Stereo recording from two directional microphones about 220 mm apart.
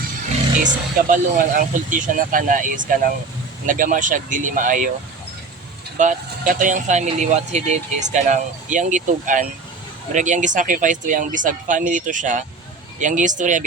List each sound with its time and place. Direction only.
1.1 s speech: 35° right (ahead or behind)
6.0 s speech: 35° right (ahead or behind)